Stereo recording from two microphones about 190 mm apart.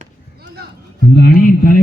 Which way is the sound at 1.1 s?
55° left (ahead or behind).